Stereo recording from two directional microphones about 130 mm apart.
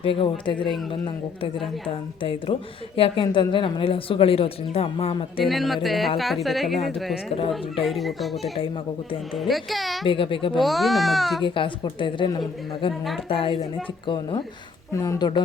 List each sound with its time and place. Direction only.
0.0 s speech: 45° left (ahead or behind)
2.2 s speech: 45° left (ahead or behind)
5.4 s a child's voice: centre (ahead or behind)
7.3 s speech: 50° left (ahead or behind)
7.5 s a child's voice: centre (ahead or behind)
10.1 s a woman's voice: 40° left (ahead or behind)
10.6 s a child's voice: centre (ahead or behind)
11.4 s a woman's voice: 40° left (ahead or behind)
14.9 s speech: 25° left (ahead or behind)